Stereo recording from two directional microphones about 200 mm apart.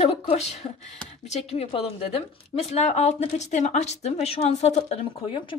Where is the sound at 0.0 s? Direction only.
30° left (ahead or behind).